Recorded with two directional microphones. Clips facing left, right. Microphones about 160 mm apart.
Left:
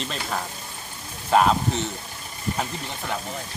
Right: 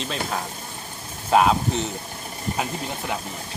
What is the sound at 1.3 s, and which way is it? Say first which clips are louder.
Speech: right 1 dB; 5° right (ahead or behind).